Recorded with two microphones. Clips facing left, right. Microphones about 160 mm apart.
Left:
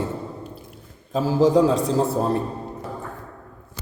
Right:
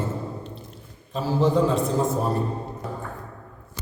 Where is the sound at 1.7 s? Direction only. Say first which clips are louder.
Left 2 dB; 35° left (ahead or behind).